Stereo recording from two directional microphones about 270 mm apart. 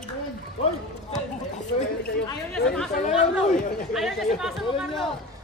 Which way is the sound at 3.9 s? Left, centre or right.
Centre.